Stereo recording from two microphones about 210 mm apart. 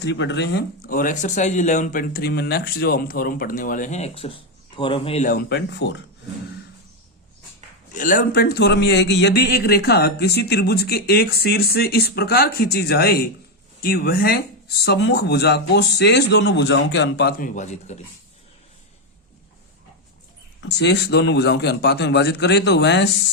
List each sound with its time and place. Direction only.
0.0 s speech: 55° left (ahead or behind); by 5.3 s 30° left (ahead or behind)
5.3 s speech: 55° left (ahead or behind)
7.9 s a man's voice: 40° left (ahead or behind)
20.6 s a man's voice: 55° left (ahead or behind)